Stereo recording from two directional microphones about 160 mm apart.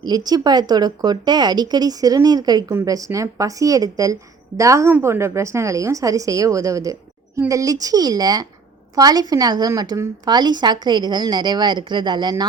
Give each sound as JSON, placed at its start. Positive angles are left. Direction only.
{"t": 0.0, "sound": "speech", "side_deg": -25}